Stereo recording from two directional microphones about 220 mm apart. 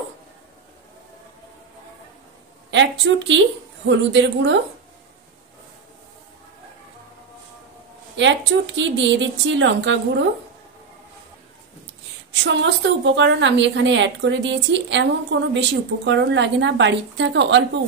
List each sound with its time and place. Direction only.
2.7 s a woman's voice: 55° right (ahead or behind)
8.2 s a woman's voice: 55° right (ahead or behind)
12.4 s a woman's voice: 55° right (ahead or behind)